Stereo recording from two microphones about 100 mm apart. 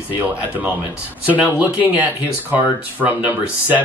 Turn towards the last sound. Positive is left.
turn(degrees=-15)  # may be behind; listen again after turning